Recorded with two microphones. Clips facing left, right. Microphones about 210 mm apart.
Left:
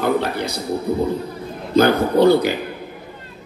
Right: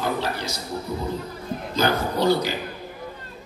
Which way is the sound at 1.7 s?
55° left (ahead or behind).